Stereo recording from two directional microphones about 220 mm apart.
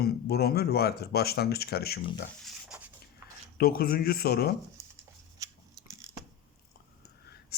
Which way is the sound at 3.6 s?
45° left (ahead or behind).